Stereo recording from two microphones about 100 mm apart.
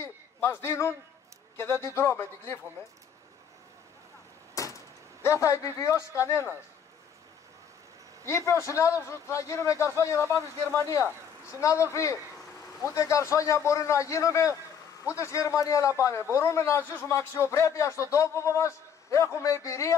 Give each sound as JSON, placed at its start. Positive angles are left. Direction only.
{"t": 0.0, "sound": "a sound", "side_deg": 25}
{"t": 1.6, "sound": "speech", "side_deg": 30}
{"t": 4.6, "sound": "speech", "side_deg": 30}
{"t": 8.3, "sound": "a man's voice", "side_deg": 30}